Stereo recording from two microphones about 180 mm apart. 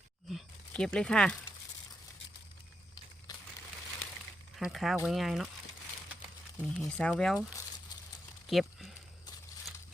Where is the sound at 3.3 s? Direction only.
20° left (ahead or behind).